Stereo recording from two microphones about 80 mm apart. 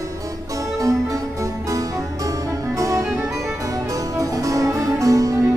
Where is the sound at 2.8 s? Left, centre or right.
Right.